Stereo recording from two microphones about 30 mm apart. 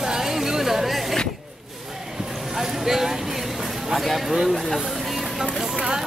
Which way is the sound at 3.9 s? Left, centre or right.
Centre.